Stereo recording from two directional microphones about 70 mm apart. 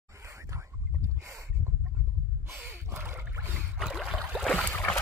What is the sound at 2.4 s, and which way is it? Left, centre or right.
Gasp, right.